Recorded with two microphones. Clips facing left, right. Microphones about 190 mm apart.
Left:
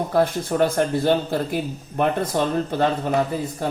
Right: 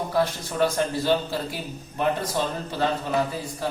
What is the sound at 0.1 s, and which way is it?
Speech, 50° left (ahead or behind).